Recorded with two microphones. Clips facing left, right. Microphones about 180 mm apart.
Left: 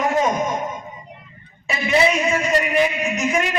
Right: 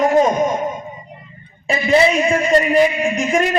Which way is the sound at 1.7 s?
35° right (ahead or behind).